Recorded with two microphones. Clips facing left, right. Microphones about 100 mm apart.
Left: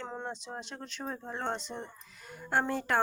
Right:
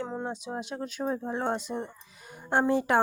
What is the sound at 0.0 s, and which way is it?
Speech, 10° right (ahead or behind).